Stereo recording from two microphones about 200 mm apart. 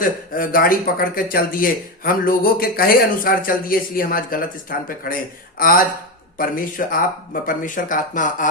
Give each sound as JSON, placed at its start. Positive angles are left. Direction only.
{"t": 0.0, "sound": "speech", "side_deg": 45}